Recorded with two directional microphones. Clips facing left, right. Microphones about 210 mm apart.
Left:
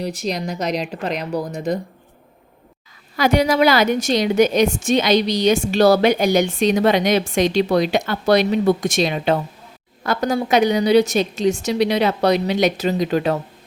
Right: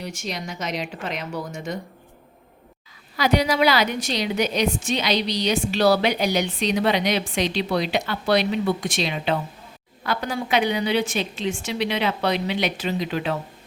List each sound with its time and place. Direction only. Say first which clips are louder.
0.0 s a woman's voice: left 7 dB; 35° left (ahead or behind)
3.2 s a woman's voice: left 4 dB; 50° left (ahead or behind)